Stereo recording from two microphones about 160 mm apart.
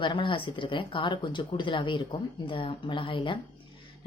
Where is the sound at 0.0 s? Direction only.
30° left (ahead or behind).